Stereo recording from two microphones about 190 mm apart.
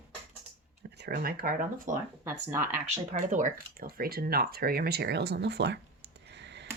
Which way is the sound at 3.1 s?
40° right (ahead or behind).